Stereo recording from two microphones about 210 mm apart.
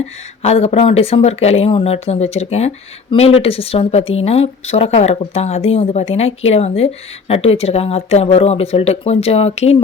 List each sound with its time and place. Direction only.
0.4 s speech: 30° left (ahead or behind)